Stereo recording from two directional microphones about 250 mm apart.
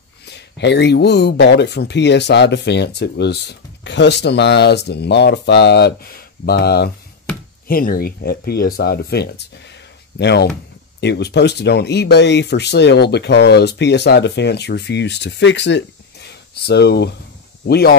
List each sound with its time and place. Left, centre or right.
0.3 s speech: left